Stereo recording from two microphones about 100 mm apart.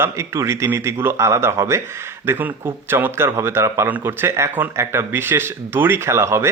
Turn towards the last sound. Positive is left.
turn(degrees=-25)  # may be behind; listen again after turning